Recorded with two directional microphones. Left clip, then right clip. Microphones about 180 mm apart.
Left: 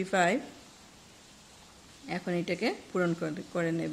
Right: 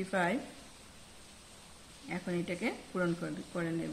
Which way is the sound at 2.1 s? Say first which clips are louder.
Left 5 dB; 60° left (ahead or behind).